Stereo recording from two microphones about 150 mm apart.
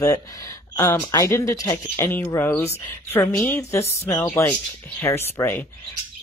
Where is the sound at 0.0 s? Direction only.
25° left (ahead or behind).